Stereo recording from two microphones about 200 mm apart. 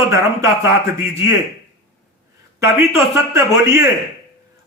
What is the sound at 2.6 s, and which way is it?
A man's voice, 15° right (ahead or behind).